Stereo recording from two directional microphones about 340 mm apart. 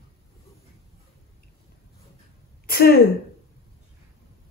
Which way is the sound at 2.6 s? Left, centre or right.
Left.